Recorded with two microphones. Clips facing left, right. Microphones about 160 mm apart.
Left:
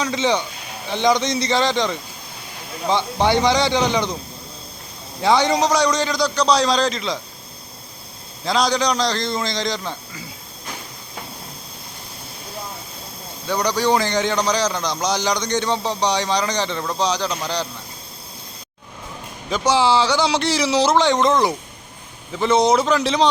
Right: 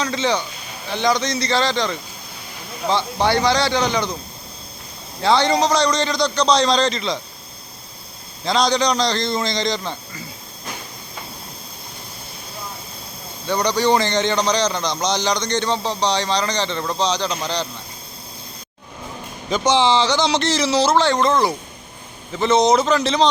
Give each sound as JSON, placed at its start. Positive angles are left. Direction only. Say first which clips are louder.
{"t": 0.0, "sound": "a man's voice", "louder": "left 1 dB", "side_deg": 15}
{"t": 5.2, "sound": "a man's voice", "louder": "even", "side_deg": 15}
{"t": 8.4, "sound": "a man's voice", "louder": "right 1 dB", "side_deg": 5}
{"t": 13.5, "sound": "a man's voice", "louder": "right 1 dB", "side_deg": 5}
{"t": 19.5, "sound": "a man's voice", "louder": "right 1 dB", "side_deg": 5}